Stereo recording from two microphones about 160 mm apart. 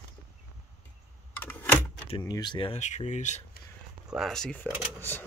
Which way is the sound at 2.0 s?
30° left (ahead or behind).